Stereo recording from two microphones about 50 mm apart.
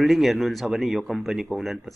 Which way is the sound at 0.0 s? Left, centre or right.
Centre.